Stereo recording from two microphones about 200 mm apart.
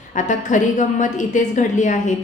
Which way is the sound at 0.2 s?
40° left (ahead or behind).